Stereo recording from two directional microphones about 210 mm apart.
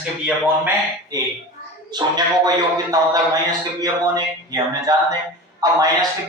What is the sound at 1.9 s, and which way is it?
A man's voice, 20° right (ahead or behind).